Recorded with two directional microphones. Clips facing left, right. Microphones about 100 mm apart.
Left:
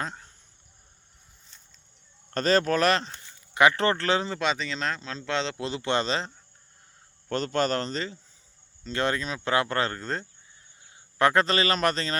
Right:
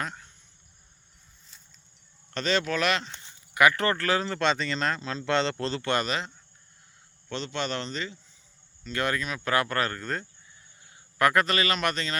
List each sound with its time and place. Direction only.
0.0 s a sound: 30° left (ahead or behind)
2.3 s a man's voice: 40° left (ahead or behind); by 4.3 s 25° left (ahead or behind)
4.3 s speech: 5° left (ahead or behind)
5.5 s speech: 15° left (ahead or behind); by 6.3 s 30° left (ahead or behind)
7.3 s a man's voice: 45° left (ahead or behind)